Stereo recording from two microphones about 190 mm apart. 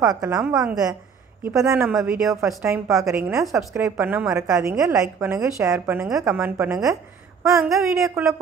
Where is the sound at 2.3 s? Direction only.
15° right (ahead or behind).